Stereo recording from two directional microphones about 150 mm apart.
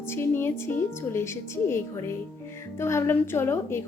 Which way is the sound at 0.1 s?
15° left (ahead or behind).